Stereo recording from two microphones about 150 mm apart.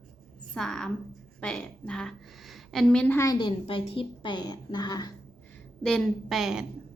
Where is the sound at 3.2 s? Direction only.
25° left (ahead or behind).